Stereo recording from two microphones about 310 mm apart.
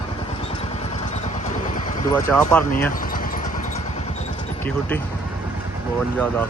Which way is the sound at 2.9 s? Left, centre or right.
Left.